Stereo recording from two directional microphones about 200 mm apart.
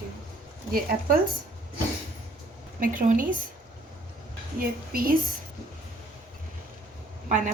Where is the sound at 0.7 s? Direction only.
45° right (ahead or behind).